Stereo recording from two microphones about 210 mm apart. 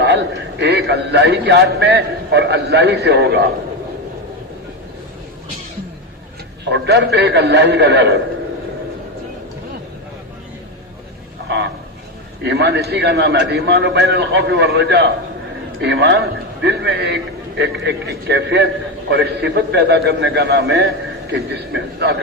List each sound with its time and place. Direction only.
0.6 s a man's voice: 50° right (ahead or behind)
6.7 s a man's voice: 55° right (ahead or behind)
12.4 s a man's voice: 55° right (ahead or behind)